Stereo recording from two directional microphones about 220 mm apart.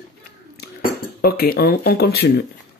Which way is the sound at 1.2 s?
45° left (ahead or behind).